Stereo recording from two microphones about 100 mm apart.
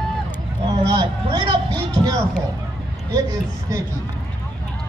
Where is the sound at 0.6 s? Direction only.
50° right (ahead or behind).